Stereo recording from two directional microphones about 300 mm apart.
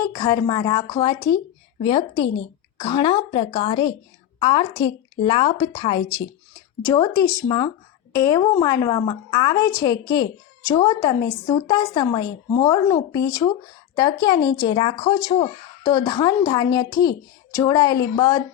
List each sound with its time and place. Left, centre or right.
0.0 s speech: centre